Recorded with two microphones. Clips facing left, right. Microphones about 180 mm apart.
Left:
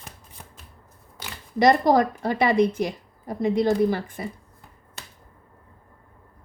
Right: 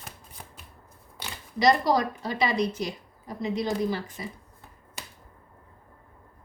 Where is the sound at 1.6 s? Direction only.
50° left (ahead or behind).